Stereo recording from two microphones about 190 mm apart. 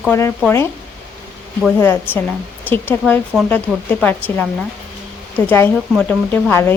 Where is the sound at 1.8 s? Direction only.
10° left (ahead or behind).